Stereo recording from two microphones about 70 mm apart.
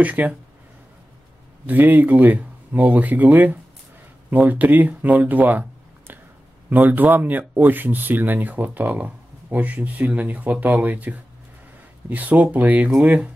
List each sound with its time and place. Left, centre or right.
0.0 s speech: right
1.7 s speech: right